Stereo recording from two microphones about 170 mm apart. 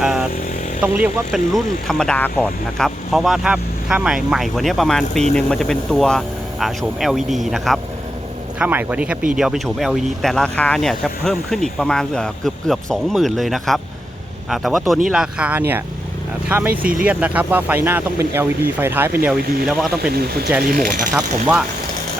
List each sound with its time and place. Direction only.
0.0 s vehicle: 5° right (ahead or behind)
0.8 s speech: 10° right (ahead or behind)
20.1 s speech: 65° right (ahead or behind)